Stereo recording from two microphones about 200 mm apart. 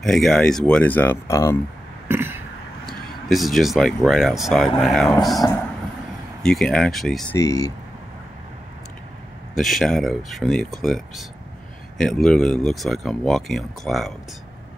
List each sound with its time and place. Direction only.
0.0 s speech: centre (ahead or behind)
2.0 s a sound: 10° right (ahead or behind)
2.9 s speech: centre (ahead or behind)
7.3 s speech: 15° left (ahead or behind)
9.6 s speech: centre (ahead or behind)